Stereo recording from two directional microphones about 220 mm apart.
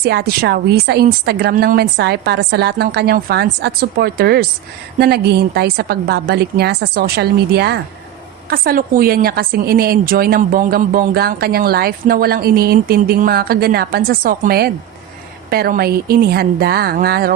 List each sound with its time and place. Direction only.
0.0 s a woman's voice: 45° right (ahead or behind)